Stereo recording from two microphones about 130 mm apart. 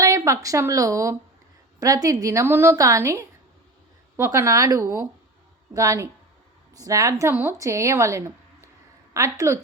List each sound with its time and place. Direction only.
0.0 s a woman's voice: 25° right (ahead or behind)